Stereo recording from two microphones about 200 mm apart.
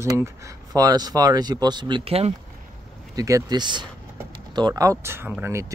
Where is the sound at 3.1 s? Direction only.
15° right (ahead or behind).